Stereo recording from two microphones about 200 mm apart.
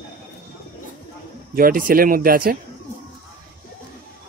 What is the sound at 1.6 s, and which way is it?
Speech, 45° right (ahead or behind).